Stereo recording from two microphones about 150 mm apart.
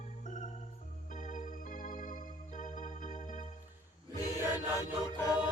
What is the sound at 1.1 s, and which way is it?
Organ, 60° left (ahead or behind).